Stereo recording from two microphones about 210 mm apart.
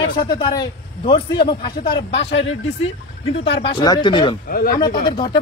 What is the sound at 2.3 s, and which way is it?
Speech, 60° left (ahead or behind).